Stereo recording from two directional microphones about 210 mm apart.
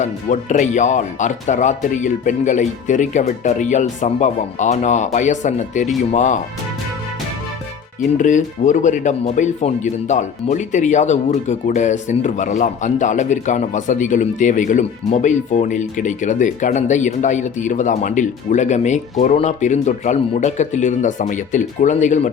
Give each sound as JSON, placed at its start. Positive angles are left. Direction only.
{"t": 0.0, "sound": "speech", "side_deg": 35}
{"t": 8.2, "sound": "speech", "side_deg": 35}